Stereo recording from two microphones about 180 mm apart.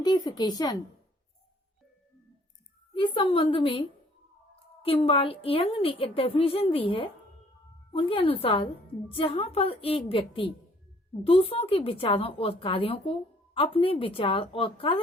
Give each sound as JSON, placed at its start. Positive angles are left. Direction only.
{"t": 0.0, "sound": "a woman's voice", "side_deg": 20}
{"t": 2.9, "sound": "a woman's voice", "side_deg": 30}
{"t": 5.0, "sound": "a woman's voice", "side_deg": 30}